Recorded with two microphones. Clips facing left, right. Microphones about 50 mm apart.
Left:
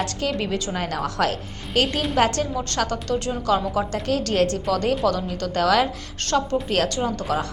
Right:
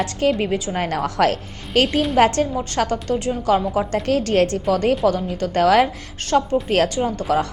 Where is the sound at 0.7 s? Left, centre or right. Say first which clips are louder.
Right 4 dB; right.